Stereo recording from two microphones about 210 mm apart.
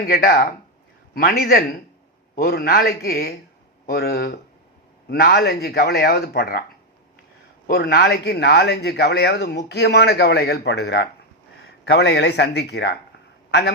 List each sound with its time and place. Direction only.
0.0 s speech: 45° left (ahead or behind)
7.7 s a man's voice: 50° left (ahead or behind)